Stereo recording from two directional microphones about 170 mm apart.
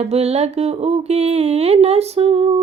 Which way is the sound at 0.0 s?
40° right (ahead or behind).